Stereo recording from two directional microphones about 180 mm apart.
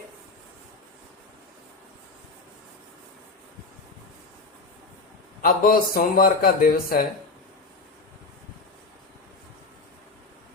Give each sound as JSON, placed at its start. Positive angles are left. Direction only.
{"t": 5.4, "sound": "speech", "side_deg": 55}